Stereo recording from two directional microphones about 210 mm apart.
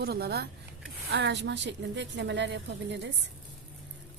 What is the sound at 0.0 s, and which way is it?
A woman's voice, 50° right (ahead or behind).